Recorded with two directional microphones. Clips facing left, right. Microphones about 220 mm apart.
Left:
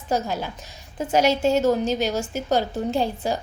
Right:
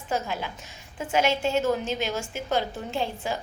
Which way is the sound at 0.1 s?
40° left (ahead or behind).